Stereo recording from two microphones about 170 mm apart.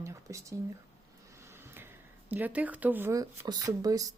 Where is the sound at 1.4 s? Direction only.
15° right (ahead or behind).